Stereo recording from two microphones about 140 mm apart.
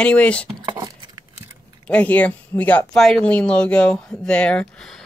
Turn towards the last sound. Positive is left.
turn(degrees=5)  # may be behind; listen again after turning